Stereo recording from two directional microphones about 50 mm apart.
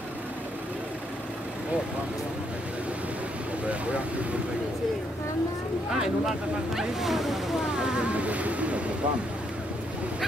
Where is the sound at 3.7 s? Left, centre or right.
Right.